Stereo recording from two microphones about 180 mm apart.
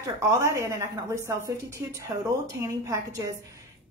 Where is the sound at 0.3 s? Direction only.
15° right (ahead or behind).